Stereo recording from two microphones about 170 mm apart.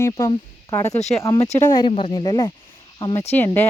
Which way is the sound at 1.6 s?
25° left (ahead or behind).